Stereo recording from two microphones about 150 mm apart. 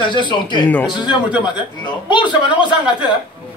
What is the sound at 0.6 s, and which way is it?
Speech, 10° left (ahead or behind).